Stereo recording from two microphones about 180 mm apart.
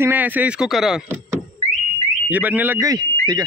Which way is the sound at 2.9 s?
20° right (ahead or behind).